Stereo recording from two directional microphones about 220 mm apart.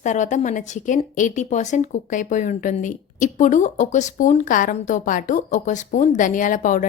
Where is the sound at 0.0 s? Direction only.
35° left (ahead or behind).